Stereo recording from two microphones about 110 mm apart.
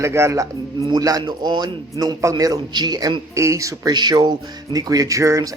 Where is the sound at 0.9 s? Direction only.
35° right (ahead or behind).